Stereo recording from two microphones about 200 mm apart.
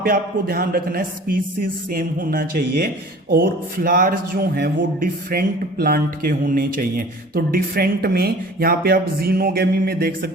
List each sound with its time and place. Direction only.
0.0 s speech: 50° right (ahead or behind)